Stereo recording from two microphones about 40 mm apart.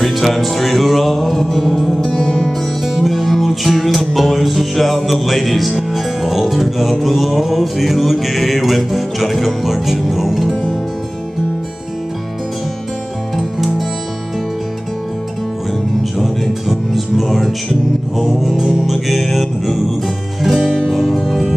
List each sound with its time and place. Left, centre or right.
0.0 s music: centre
2.8 s music: centre
13.4 s music: centre
16.0 s music: centre
20.5 s music: centre
20.9 s music: centre